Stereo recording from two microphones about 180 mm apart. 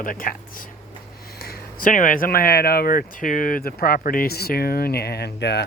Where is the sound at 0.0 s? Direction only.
50° left (ahead or behind).